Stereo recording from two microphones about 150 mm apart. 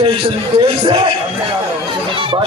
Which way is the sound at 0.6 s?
35° right (ahead or behind).